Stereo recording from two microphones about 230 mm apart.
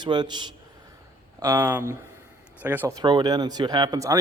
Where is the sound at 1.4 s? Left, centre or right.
Centre.